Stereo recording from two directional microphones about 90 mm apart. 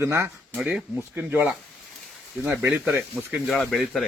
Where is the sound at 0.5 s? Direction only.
5° right (ahead or behind).